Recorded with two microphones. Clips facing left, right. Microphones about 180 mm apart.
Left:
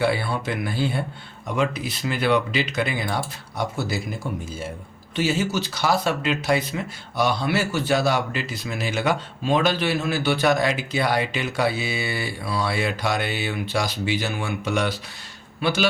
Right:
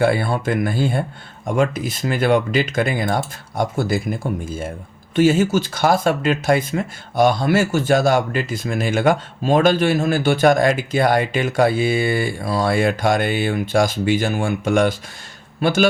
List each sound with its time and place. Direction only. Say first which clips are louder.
0.0 s speech: right 5 dB; 50° right (ahead or behind)